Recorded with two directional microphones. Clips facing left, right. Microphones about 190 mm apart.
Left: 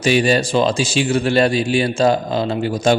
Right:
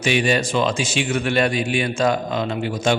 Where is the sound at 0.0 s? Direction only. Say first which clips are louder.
Left 4 dB; 35° left (ahead or behind).